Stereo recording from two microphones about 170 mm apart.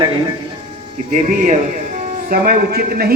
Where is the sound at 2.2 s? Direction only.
60° right (ahead or behind).